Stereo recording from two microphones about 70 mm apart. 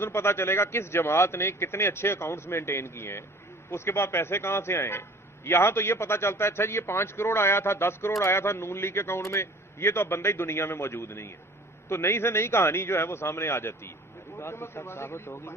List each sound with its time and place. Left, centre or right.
0.0 s a man's voice: left